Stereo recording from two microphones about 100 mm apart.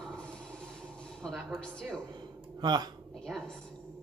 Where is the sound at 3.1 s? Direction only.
5° left (ahead or behind).